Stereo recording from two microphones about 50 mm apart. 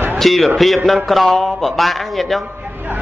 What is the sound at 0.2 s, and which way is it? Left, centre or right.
A man's voice, centre.